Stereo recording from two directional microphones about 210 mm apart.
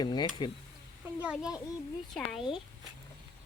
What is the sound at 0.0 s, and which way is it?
Speech, 20° left (ahead or behind).